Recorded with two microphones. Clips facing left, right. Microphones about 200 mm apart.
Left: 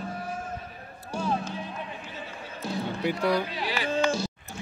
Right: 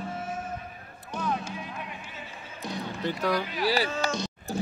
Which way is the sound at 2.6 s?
10° left (ahead or behind).